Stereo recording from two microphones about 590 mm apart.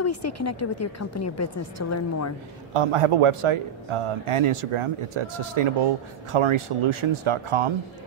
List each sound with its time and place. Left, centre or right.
0.0 s a woman's voice: left
2.7 s a man's voice: right